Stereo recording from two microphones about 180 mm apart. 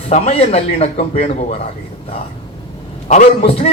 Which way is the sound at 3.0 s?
35° left (ahead or behind).